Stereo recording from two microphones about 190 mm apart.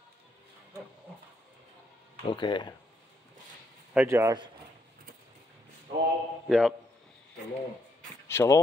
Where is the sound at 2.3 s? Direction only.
25° left (ahead or behind).